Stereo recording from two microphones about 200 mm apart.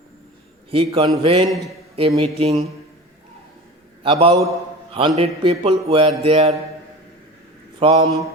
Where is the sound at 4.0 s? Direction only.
25° right (ahead or behind).